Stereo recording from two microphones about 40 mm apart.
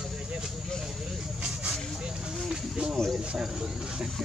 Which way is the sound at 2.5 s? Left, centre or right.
Centre.